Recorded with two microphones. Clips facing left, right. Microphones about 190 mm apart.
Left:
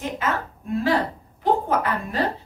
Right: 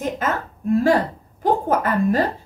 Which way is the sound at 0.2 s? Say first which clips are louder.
Right 3 dB; 45° right (ahead or behind).